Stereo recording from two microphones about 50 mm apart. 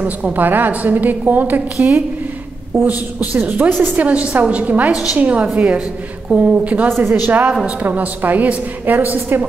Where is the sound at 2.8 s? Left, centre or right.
Right.